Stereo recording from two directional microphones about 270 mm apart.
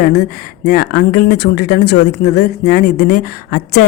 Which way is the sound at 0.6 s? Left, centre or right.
Left.